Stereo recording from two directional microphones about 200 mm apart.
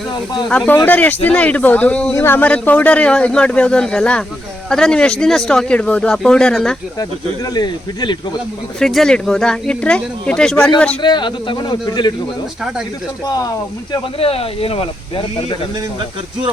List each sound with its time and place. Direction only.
0.4 s speech: 5° left (ahead or behind)
7.5 s speech: 20° left (ahead or behind)
8.8 s speech: centre (ahead or behind)
11.0 s speech: 20° left (ahead or behind)
13.9 s speech: 30° left (ahead or behind)